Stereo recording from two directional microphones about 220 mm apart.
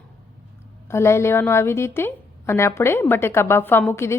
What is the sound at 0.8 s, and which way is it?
A woman's voice, 10° left (ahead or behind).